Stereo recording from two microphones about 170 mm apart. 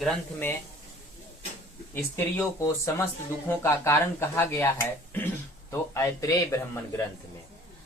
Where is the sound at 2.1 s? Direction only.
15° left (ahead or behind).